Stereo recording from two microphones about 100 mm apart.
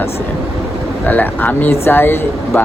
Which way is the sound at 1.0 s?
15° left (ahead or behind).